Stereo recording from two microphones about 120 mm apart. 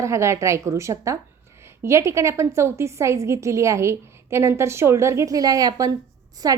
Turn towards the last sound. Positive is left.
turn(degrees=-30)  # may be behind; listen again after turning